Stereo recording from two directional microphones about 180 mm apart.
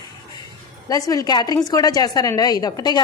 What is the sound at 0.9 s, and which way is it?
A woman's voice, 20° left (ahead or behind).